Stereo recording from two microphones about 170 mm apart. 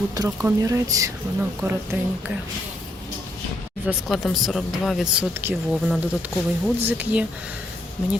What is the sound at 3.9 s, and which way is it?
Speech, centre (ahead or behind).